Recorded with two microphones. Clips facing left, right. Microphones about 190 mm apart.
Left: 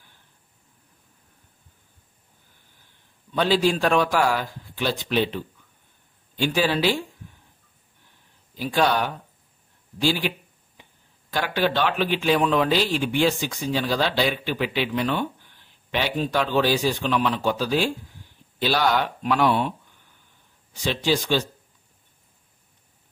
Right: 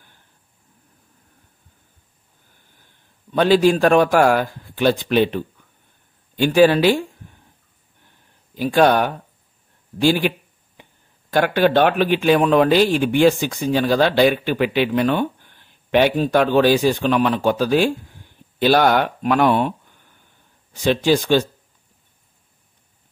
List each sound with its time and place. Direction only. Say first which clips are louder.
3.3 s speech: right 6 dB; 55° right (ahead or behind)
8.5 s speech: right 7 dB; 55° right (ahead or behind)
20.8 s speech: right 7 dB; 55° right (ahead or behind)